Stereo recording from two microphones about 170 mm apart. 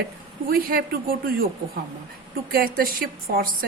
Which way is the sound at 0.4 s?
60° right (ahead or behind).